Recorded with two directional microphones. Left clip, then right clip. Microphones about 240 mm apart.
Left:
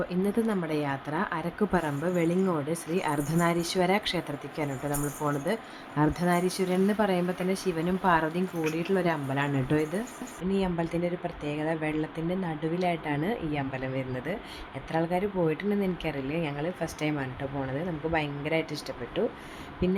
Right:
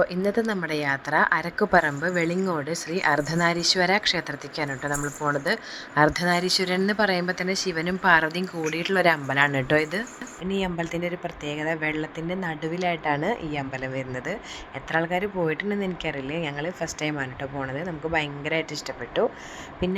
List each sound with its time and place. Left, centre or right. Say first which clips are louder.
0.0 s a woman's voice: right 6 dB; right
19.8 s a woman's voice: right 1 dB; centre